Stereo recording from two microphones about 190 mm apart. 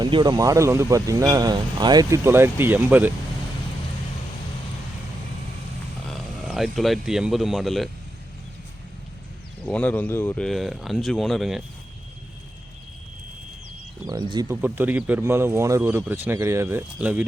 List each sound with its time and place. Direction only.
0.0 s speech: 25° right (ahead or behind)
6.1 s speech: centre (ahead or behind)
9.6 s speech: 5° left (ahead or behind)
14.1 s speech: 20° right (ahead or behind)